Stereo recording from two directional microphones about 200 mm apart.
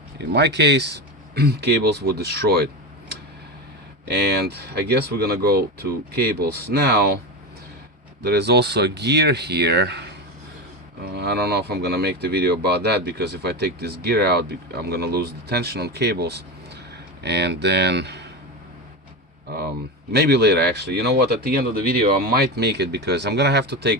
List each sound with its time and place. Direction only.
0.3 s speech: 55° right (ahead or behind)
4.1 s speech: 55° right (ahead or behind)
8.2 s speech: 55° right (ahead or behind)
20.1 s speech: 55° right (ahead or behind)